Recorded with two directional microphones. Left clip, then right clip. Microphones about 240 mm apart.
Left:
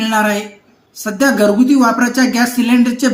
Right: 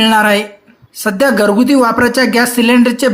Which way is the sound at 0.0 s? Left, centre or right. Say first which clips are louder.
Right 5 dB; right.